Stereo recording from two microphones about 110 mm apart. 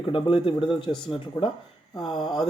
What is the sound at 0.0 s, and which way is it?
Speech, 50° left (ahead or behind).